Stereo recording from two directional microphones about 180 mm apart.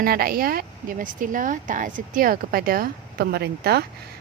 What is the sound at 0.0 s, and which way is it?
Speech, 55° right (ahead or behind).